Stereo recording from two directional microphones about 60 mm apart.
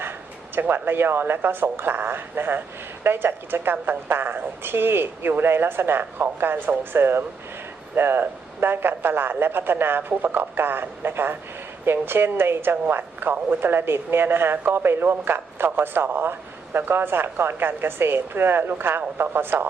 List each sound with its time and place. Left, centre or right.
0.5 s speech: right